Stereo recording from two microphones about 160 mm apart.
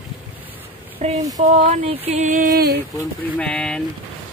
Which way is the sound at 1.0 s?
45° right (ahead or behind).